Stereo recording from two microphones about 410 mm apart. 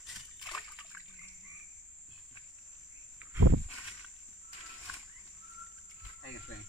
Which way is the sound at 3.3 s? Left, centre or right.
Right.